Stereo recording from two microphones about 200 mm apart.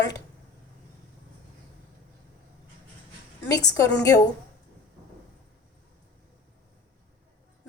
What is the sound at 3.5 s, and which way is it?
Speech, 20° left (ahead or behind).